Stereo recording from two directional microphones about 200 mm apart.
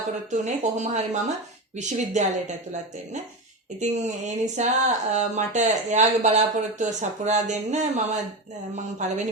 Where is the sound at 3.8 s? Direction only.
35° right (ahead or behind).